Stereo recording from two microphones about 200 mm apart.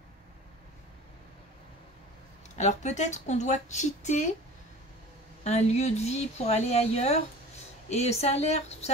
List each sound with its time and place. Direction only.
2.5 s speech: 35° left (ahead or behind)
5.4 s speech: 35° left (ahead or behind)